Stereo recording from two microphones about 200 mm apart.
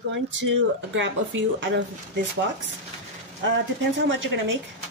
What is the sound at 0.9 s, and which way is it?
Speech, 65° right (ahead or behind).